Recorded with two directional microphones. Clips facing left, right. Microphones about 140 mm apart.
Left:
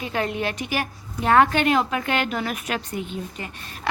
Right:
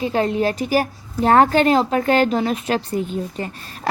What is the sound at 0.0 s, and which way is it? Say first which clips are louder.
A woman's voice: right 7 dB; 30° right (ahead or behind).